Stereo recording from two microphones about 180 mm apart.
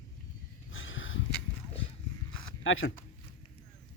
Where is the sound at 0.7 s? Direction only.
90° left.